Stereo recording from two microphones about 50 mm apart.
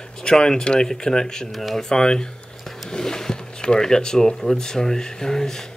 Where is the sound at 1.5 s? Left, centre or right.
Centre.